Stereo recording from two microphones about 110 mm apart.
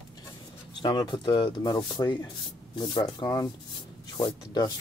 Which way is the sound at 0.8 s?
45° left (ahead or behind).